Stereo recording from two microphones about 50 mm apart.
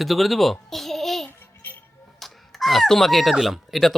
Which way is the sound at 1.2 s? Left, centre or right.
Left.